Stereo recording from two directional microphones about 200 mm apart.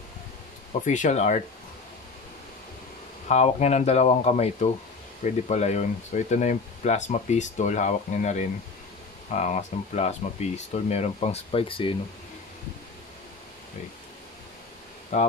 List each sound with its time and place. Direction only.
0.8 s speech: 40° left (ahead or behind)
3.3 s speech: 35° left (ahead or behind)
15.1 s speech: 35° left (ahead or behind)